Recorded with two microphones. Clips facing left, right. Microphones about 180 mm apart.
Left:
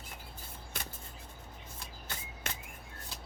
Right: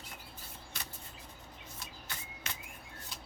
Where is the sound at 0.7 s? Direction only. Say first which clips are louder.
Left 5 dB; 50° left (ahead or behind).